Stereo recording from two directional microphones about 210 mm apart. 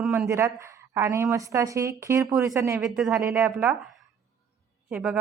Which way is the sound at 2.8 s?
Centre (ahead or behind).